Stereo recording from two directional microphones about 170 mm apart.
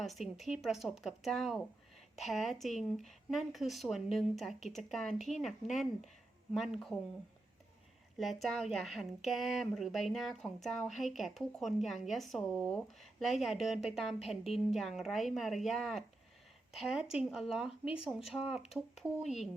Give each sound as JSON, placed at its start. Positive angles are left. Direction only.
{"t": 0.0, "sound": "speech", "side_deg": 0}
{"t": 8.2, "sound": "speech", "side_deg": 0}
{"t": 17.7, "sound": "speech", "side_deg": 35}
{"t": 18.3, "sound": "speech", "side_deg": 0}